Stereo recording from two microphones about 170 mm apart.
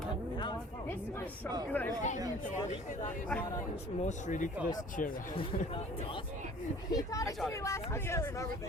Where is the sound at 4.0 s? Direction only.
45° left (ahead or behind).